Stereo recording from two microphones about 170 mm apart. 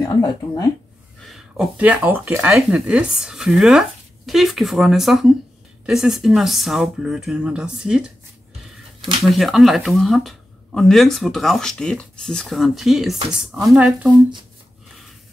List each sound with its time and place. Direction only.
0.0 s speech: 20° left (ahead or behind)
1.2 s speech: centre (ahead or behind)
9.3 s speech: centre (ahead or behind)